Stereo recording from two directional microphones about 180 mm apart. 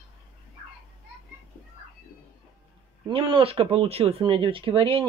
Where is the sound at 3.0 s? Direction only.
30° right (ahead or behind).